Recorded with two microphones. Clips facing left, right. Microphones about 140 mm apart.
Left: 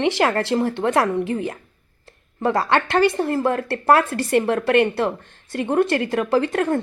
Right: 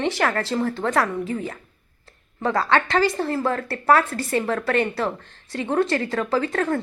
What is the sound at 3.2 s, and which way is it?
Speech, 15° left (ahead or behind).